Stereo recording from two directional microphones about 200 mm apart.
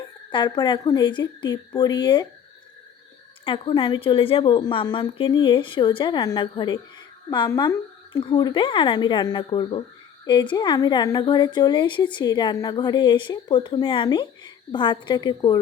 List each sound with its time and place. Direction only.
0.3 s a woman's voice: 25° left (ahead or behind)
3.4 s a woman's voice: 25° left (ahead or behind)